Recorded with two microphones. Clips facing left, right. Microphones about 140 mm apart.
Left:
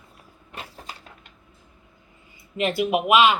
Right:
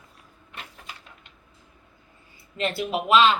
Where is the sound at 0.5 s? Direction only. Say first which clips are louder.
Left 4 dB; 35° left (ahead or behind).